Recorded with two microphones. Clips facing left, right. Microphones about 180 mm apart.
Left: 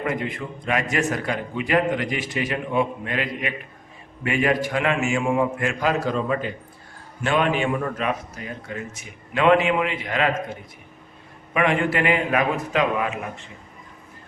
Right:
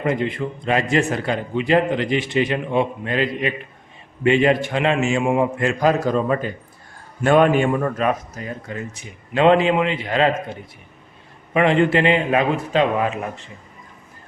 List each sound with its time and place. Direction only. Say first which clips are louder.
0.0 s a man's voice: right 5 dB; 25° right (ahead or behind); by 8.1 s 45° right (ahead or behind)
8.7 s a man's voice: right 2 dB; 30° right (ahead or behind)
11.5 s a man's voice: right 5 dB; 30° right (ahead or behind)